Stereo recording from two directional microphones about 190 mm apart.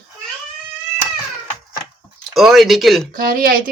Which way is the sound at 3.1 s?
50° right (ahead or behind).